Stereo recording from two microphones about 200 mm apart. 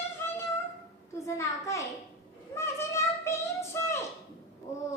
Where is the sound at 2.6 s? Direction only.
10° left (ahead or behind).